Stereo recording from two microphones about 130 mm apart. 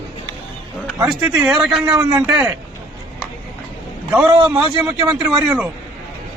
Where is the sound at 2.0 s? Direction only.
20° right (ahead or behind).